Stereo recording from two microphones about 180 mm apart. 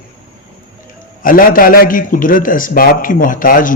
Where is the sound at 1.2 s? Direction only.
50° left (ahead or behind).